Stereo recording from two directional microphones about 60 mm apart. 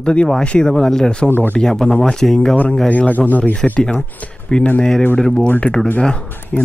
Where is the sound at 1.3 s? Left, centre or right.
Left.